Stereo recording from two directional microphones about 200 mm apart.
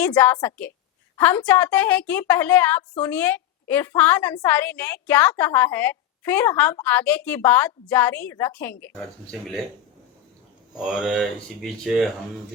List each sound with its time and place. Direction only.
0.0 s a woman's voice: 10° left (ahead or behind)
10.8 s speech: centre (ahead or behind)